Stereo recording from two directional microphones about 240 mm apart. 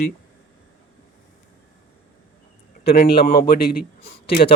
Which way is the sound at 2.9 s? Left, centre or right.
Left.